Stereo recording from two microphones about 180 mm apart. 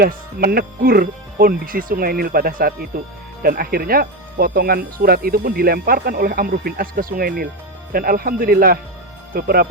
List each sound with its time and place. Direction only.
0.0 s speech: 55° right (ahead or behind)